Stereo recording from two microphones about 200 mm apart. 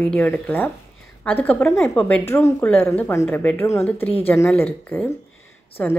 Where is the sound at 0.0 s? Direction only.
5° left (ahead or behind).